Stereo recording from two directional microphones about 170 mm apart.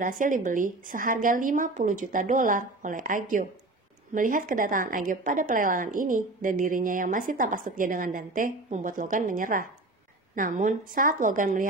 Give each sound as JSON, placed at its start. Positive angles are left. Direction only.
{"t": 0.0, "sound": "a woman's voice", "side_deg": -50}